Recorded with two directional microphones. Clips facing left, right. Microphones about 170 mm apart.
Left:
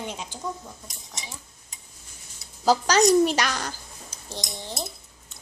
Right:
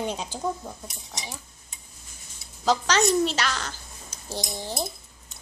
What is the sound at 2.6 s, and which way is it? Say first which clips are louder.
A woman's voice: left 3 dB; 10° left (ahead or behind).